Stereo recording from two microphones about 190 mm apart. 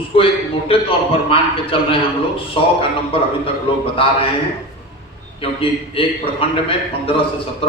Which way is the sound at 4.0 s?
30° left (ahead or behind).